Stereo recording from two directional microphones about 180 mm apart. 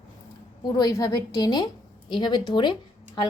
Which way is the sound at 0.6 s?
20° left (ahead or behind).